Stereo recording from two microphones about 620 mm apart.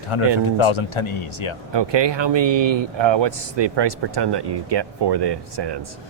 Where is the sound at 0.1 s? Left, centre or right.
Left.